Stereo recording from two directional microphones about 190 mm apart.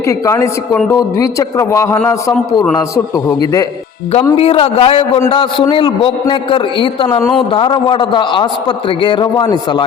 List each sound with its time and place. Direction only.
0.1 s a man's voice: 15° left (ahead or behind)
4.4 s a man's voice: 30° left (ahead or behind)